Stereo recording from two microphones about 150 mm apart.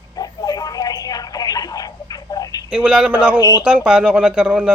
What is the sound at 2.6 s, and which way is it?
A man's voice, 5° right (ahead or behind).